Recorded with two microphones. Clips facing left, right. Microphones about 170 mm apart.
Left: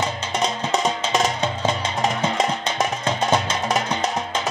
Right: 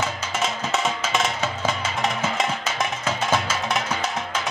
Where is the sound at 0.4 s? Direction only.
35° left (ahead or behind).